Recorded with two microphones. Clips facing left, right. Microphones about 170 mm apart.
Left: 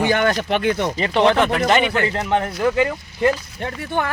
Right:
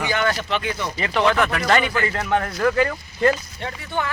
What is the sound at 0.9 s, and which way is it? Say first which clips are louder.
Speech: left 1 dB; 30° left (ahead or behind).